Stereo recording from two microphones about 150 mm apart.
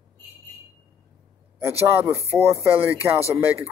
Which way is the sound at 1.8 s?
20° right (ahead or behind).